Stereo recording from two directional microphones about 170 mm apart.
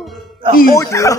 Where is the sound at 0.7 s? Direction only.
20° left (ahead or behind).